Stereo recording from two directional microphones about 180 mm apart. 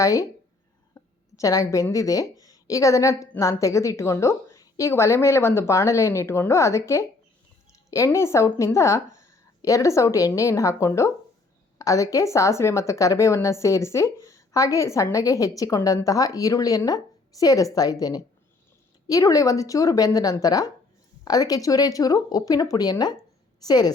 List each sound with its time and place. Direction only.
0.0 s a woman's voice: 20° left (ahead or behind)
19.0 s speech: 20° left (ahead or behind)